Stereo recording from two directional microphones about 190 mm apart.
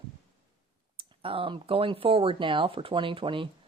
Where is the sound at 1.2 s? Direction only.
25° right (ahead or behind).